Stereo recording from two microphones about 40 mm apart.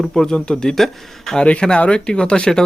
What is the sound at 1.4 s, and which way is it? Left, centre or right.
Speech, left.